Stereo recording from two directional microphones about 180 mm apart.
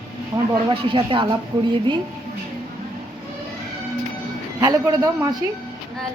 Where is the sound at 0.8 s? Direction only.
30° right (ahead or behind).